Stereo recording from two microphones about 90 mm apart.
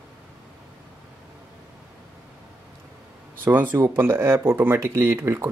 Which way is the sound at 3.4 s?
20° right (ahead or behind).